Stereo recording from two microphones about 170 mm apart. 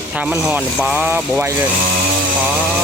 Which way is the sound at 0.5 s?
5° right (ahead or behind).